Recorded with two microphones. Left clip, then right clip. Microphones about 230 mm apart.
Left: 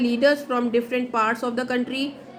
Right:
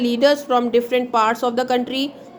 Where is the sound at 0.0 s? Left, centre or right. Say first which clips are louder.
Right 3 dB; centre.